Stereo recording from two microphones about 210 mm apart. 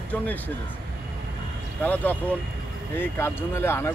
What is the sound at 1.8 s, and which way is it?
Speech, 5° left (ahead or behind).